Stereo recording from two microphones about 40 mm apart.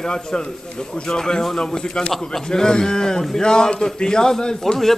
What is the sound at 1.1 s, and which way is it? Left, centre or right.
A man's voice, centre.